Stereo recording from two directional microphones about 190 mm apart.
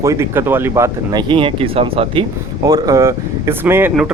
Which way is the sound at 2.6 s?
15° right (ahead or behind).